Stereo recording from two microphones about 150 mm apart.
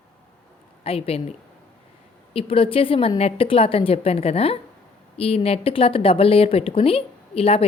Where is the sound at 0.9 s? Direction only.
40° left (ahead or behind).